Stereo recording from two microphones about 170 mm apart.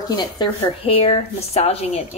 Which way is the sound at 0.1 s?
25° left (ahead or behind).